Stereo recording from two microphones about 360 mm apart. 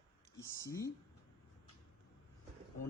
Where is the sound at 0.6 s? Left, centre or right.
Centre.